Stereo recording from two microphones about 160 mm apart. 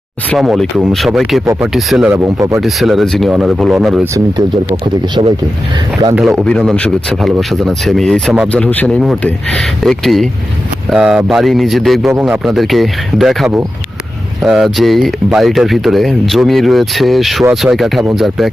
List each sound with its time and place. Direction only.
0.3 s speech: centre (ahead or behind)
2.1 s speech: 20° right (ahead or behind)
2.6 s speech: centre (ahead or behind)
4.0 s speech: 20° right (ahead or behind)
4.7 s speech: 30° right (ahead or behind)
6.4 s speech: 5° left (ahead or behind)